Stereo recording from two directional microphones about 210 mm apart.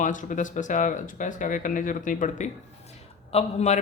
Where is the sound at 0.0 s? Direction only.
35° left (ahead or behind).